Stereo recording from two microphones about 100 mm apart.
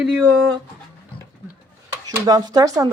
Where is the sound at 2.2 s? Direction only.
40° right (ahead or behind).